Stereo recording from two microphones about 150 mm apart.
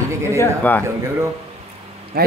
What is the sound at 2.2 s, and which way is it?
Speech, 90° right.